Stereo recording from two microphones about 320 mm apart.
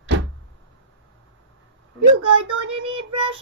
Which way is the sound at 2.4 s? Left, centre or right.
Right.